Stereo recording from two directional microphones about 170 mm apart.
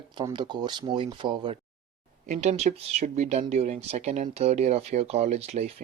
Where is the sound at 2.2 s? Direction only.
45° right (ahead or behind).